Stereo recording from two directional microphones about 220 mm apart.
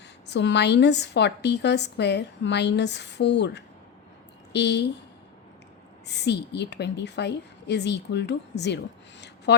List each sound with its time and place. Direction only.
0.3 s a woman's voice: 50° left (ahead or behind)
6.1 s a woman's voice: 50° left (ahead or behind)